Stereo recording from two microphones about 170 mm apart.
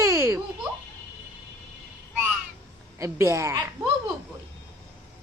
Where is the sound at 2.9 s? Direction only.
15° right (ahead or behind).